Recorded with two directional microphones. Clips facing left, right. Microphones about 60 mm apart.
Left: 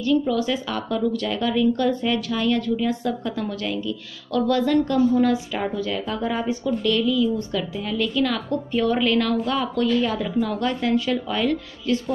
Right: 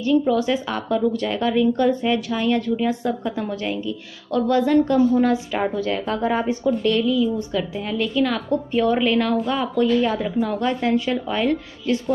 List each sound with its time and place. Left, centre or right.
0.0 s a woman's voice: right